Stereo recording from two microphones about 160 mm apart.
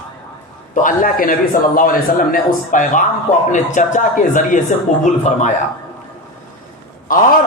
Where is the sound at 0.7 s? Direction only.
55° left (ahead or behind).